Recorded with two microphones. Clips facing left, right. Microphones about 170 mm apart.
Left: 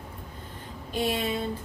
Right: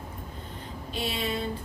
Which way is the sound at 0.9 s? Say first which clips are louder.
Left 5 dB; 50° left (ahead or behind).